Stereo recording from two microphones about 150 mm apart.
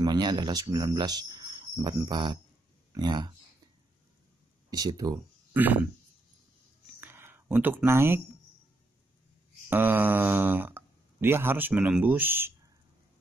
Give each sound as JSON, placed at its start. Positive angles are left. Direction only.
{"t": 0.0, "sound": "speech", "side_deg": -30}
{"t": 4.6, "sound": "speech", "side_deg": -25}
{"t": 5.5, "sound": "speech", "side_deg": -10}
{"t": 7.0, "sound": "a sound", "side_deg": -15}
{"t": 9.7, "sound": "speech", "side_deg": -15}